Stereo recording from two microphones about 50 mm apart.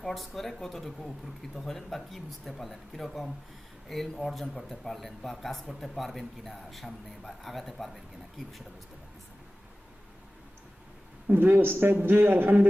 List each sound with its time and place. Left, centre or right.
0.0 s a man's voice: centre
11.3 s a man's voice: right